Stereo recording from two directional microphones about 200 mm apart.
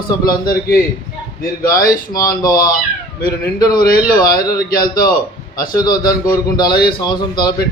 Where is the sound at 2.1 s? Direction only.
20° left (ahead or behind).